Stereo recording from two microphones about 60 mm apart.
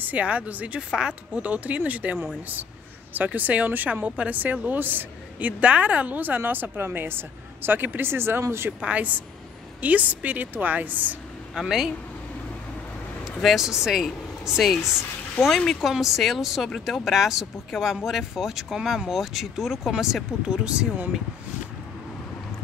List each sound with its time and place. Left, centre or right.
0.0 s speech: right
3.3 s a woman's voice: right
8.8 s speech: right
11.5 s speech: centre
13.2 s speech: centre
14.6 s speech: centre
15.9 s speech: centre